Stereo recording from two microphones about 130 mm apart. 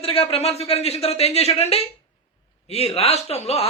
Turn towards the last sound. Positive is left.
turn(degrees=50)  # may be behind; listen again after turning